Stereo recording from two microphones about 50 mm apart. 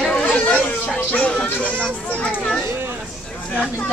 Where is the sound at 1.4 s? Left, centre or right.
Left.